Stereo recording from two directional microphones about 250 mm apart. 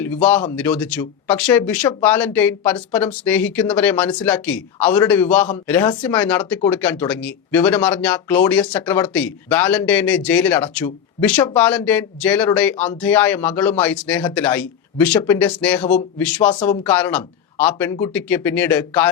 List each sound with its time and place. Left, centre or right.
0.0 s speech: centre
2.7 s speech: centre
3.2 s speech: centre
15.1 s speech: centre
15.4 s speech: centre